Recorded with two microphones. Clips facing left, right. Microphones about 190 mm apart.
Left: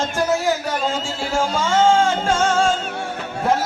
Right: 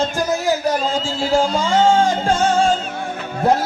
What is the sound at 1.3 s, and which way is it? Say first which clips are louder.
Music: right 3 dB; 35° right (ahead or behind).